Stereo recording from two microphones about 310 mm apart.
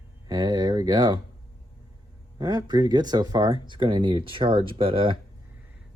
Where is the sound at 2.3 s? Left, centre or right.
Centre.